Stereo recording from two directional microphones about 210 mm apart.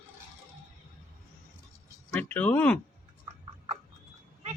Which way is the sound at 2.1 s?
5° left (ahead or behind).